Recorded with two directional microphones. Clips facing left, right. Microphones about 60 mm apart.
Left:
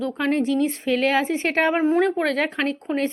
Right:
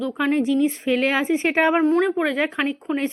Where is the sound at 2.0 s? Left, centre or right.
Centre.